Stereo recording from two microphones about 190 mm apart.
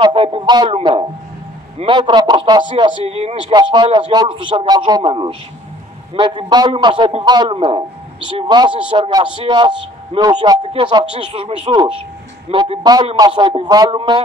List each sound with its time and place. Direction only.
0.0 s a man's voice: 25° right (ahead or behind)